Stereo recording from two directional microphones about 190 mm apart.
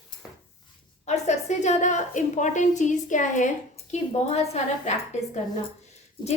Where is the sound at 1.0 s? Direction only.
35° left (ahead or behind).